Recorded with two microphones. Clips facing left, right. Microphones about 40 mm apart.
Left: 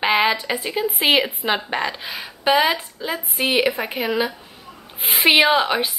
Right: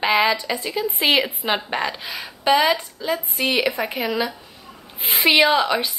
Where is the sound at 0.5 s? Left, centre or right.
Centre.